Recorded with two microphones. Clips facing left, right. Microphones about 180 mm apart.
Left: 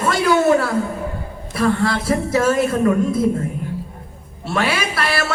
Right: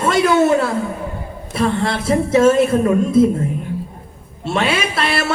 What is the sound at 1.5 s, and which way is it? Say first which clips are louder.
Speech: even; 25° right (ahead or behind).